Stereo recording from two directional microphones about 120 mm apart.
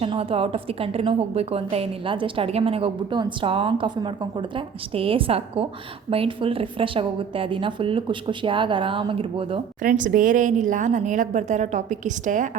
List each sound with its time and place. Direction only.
0.0 s a woman's voice: 50° right (ahead or behind)
9.9 s a woman's voice: 90° right